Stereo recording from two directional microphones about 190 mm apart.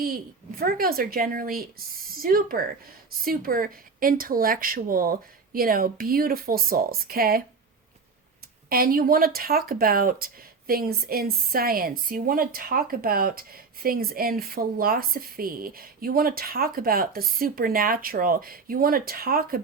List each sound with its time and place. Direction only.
0.6 s speech: 50° right (ahead or behind)
8.7 s speech: 50° right (ahead or behind)